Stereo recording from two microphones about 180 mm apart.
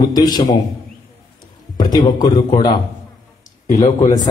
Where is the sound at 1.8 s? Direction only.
25° left (ahead or behind).